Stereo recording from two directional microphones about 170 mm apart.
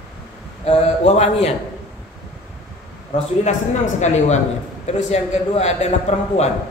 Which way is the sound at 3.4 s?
45° left (ahead or behind).